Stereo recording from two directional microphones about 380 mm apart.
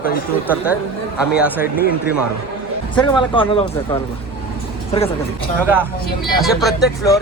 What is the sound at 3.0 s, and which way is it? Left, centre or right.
Speech, centre.